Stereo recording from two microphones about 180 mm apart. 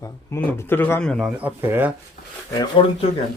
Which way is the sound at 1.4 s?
10° right (ahead or behind).